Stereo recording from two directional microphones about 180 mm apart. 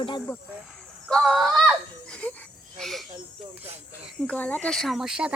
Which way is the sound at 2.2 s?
10° left (ahead or behind).